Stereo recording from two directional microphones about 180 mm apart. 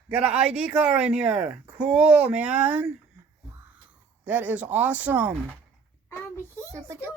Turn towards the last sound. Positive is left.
turn(degrees=-15)  # may be behind; listen again after turning